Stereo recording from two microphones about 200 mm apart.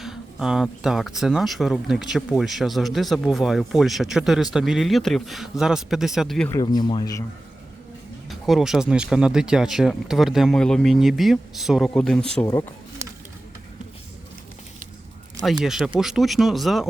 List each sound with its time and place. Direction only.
0.0 s speech: 5° right (ahead or behind)
6.5 s speech: 20° left (ahead or behind)
8.3 s speech: centre (ahead or behind)
15.6 s speech: centre (ahead or behind)